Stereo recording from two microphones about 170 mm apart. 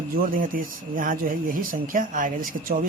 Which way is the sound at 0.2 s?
55° right (ahead or behind).